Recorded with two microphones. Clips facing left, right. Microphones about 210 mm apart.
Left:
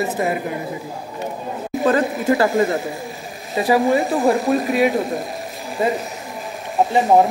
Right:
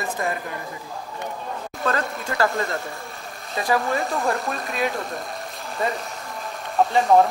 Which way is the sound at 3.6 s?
15° left (ahead or behind).